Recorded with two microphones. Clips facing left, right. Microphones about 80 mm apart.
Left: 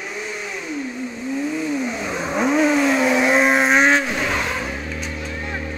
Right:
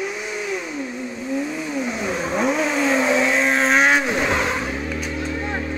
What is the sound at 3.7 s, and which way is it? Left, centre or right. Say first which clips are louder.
Vehicle: left 1 dB; centre.